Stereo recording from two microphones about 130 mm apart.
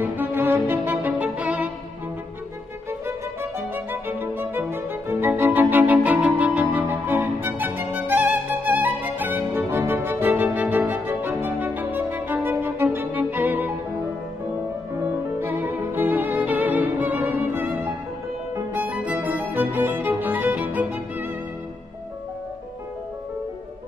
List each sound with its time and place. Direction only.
0.0 s music: 15° right (ahead or behind)
3.1 s music: 15° right (ahead or behind)
15.3 s violin: 15° right (ahead or behind)
18.5 s music: 15° right (ahead or behind)